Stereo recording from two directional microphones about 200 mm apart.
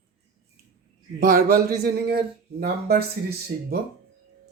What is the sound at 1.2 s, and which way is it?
Speech, 45° right (ahead or behind).